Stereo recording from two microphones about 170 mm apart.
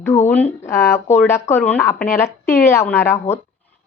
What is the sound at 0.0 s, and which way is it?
Speech, 15° left (ahead or behind).